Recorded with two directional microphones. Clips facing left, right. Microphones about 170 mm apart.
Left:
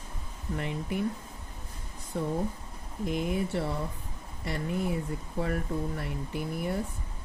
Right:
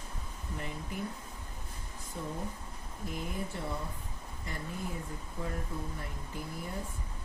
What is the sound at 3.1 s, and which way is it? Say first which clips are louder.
Speech: left 9 dB; 90° left.